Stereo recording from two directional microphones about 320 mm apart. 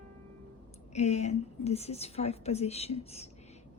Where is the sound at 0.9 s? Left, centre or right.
Left.